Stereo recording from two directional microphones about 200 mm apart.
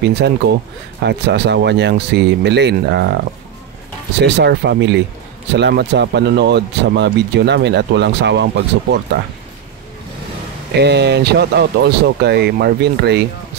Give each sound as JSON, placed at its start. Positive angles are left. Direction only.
{"t": 0.0, "sound": "speech", "side_deg": -55}
{"t": 4.2, "sound": "speech", "side_deg": -60}
{"t": 10.8, "sound": "speech", "side_deg": -55}